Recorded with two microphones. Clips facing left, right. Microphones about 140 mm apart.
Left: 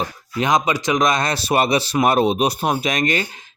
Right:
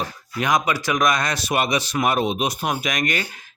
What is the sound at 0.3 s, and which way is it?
A man's voice, 25° left (ahead or behind).